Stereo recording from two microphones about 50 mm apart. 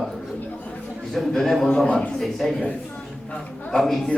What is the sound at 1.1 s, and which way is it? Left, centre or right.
Speech, centre.